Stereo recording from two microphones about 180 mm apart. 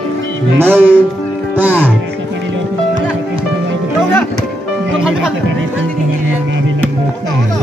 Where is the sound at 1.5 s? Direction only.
10° right (ahead or behind).